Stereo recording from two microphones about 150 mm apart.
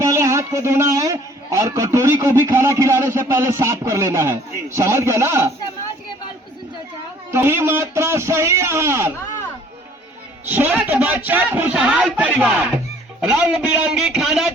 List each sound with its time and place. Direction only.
0.0 s a man's voice: 20° right (ahead or behind)
7.3 s speech: 15° right (ahead or behind)
10.5 s a man's voice: 15° right (ahead or behind)